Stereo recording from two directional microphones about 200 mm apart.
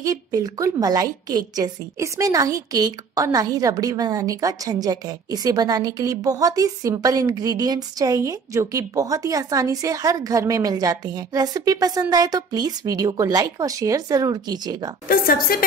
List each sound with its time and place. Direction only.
0.0 s a woman's voice: 20° right (ahead or behind)
15.0 s a woman's voice: 45° left (ahead or behind)